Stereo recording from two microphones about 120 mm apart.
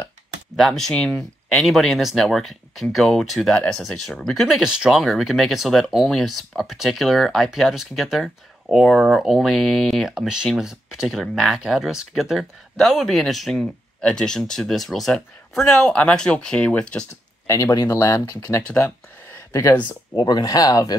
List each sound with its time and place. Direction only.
0.6 s speech: centre (ahead or behind)
17.5 s speech: 30° left (ahead or behind)
18.7 s speech: 15° left (ahead or behind)
20.2 s speech: 35° left (ahead or behind)